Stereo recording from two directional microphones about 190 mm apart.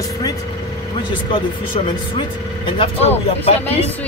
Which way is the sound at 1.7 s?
25° left (ahead or behind).